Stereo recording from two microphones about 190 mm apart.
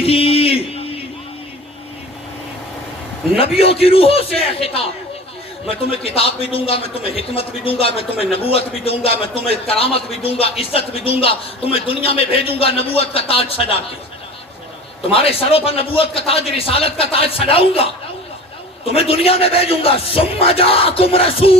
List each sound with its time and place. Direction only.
0.0 s a sound: 30° left (ahead or behind)
3.3 s a man's voice: 30° left (ahead or behind)
15.0 s a man's voice: 30° left (ahead or behind)
18.9 s a man's voice: 30° left (ahead or behind)